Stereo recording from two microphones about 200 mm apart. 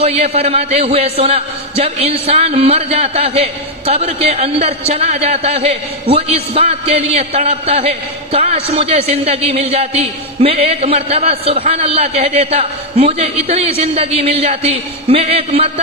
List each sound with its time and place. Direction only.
0.0 s a man's voice: 30° right (ahead or behind)